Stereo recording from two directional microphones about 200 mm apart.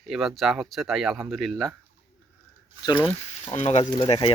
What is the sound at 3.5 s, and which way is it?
Speech, 35° left (ahead or behind).